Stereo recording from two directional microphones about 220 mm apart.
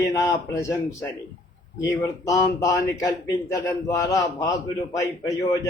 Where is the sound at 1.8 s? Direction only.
15° left (ahead or behind).